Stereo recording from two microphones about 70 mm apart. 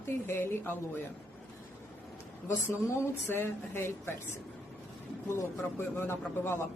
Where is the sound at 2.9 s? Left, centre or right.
Left.